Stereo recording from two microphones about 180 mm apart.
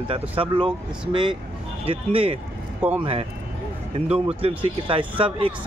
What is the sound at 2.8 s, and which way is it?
Speech, 10° right (ahead or behind).